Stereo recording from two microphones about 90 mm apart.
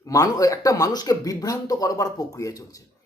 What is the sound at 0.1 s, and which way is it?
Speech, 40° left (ahead or behind).